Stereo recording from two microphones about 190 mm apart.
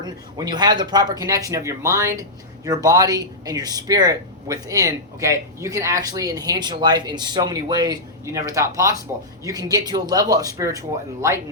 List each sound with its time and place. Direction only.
0.0 s speech: 20° right (ahead or behind)